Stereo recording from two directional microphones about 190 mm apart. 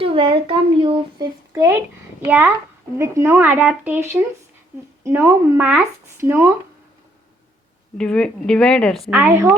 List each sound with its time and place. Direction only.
0.0 s speech: 30° right (ahead or behind); by 6.5 s 10° right (ahead or behind)
7.9 s speech: 5° left (ahead or behind); by 9.6 s 15° right (ahead or behind)